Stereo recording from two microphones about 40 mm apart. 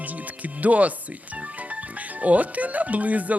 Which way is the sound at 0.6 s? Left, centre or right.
Right.